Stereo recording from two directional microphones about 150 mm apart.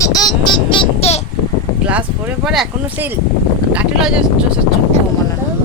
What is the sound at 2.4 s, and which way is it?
Speech, centre (ahead or behind).